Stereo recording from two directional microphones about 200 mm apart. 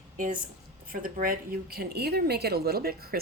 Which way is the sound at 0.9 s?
45° right (ahead or behind).